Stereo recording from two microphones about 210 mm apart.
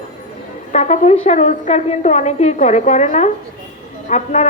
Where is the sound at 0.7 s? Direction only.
35° left (ahead or behind).